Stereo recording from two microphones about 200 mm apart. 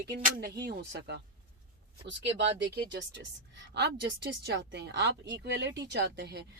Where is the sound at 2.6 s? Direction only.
60° right (ahead or behind).